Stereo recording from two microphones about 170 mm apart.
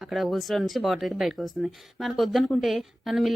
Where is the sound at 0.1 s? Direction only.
Centre (ahead or behind).